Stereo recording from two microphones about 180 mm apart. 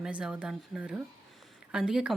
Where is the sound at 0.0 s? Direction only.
5° right (ahead or behind).